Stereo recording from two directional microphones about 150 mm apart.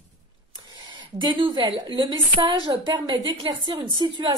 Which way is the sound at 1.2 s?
30° right (ahead or behind).